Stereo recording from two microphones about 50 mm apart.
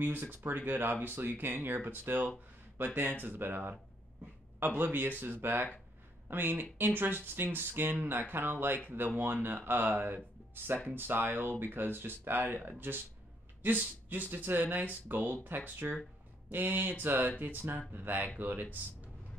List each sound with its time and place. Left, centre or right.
0.0 s speech: right
14.3 s speech: right